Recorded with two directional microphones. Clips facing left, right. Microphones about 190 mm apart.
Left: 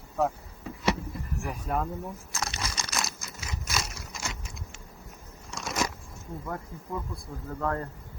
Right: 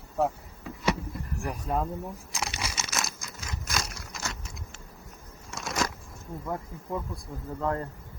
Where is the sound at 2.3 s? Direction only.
10° right (ahead or behind).